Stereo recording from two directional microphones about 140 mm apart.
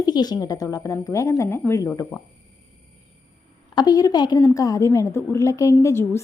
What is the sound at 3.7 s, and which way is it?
A woman's voice, 25° left (ahead or behind).